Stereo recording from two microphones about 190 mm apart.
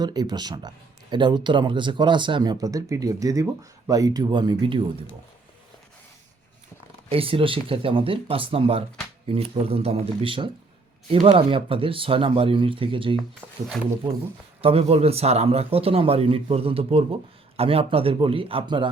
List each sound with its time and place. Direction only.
0.0 s speech: 20° right (ahead or behind)
7.1 s a man's voice: 30° right (ahead or behind)
14.6 s a man's voice: 30° right (ahead or behind)